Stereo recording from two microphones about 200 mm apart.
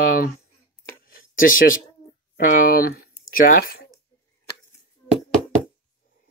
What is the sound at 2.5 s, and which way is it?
Speech, 45° left (ahead or behind).